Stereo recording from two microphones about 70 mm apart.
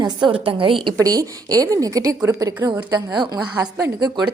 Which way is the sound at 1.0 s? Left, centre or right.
Right.